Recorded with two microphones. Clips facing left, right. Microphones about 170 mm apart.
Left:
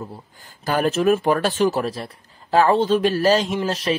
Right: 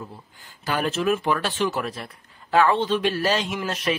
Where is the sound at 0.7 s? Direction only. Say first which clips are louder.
Left 5 dB; 45° left (ahead or behind).